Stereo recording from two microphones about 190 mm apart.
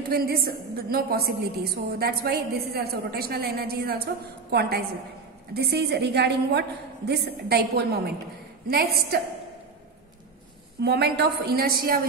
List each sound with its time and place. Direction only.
0.1 s a woman's voice: 55° right (ahead or behind)
10.8 s a woman's voice: 60° right (ahead or behind)